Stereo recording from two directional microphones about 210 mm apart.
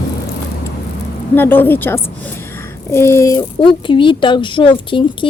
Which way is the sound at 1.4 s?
10° left (ahead or behind).